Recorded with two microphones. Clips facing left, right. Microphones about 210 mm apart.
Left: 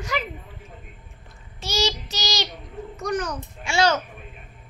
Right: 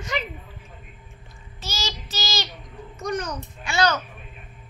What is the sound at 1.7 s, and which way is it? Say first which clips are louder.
Child singing: left 8 dB; 15° left (ahead or behind).